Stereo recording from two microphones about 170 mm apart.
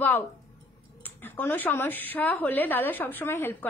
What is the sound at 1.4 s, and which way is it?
A woman's voice, 10° left (ahead or behind).